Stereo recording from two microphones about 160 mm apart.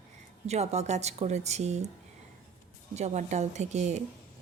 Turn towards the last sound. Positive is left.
turn(degrees=-45)  # may be behind; listen again after turning